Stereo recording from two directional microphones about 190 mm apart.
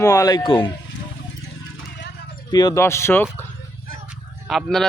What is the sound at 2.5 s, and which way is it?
Speech, 20° left (ahead or behind).